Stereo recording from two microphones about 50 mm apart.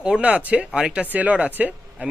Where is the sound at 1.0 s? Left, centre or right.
Right.